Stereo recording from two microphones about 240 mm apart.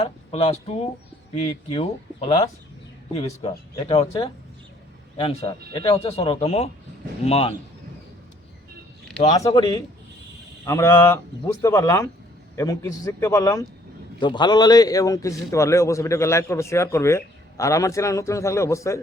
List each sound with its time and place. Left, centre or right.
0.0 s speech: left
3.8 s speech: left
9.2 s a man's voice: centre